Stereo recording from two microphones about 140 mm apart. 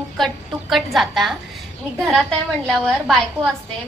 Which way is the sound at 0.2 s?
Centre (ahead or behind).